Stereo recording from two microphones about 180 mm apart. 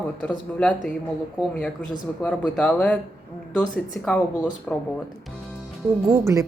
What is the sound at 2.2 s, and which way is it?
Speech, 5° left (ahead or behind).